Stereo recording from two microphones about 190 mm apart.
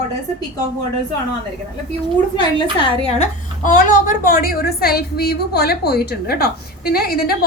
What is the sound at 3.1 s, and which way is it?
A woman's voice, 45° left (ahead or behind).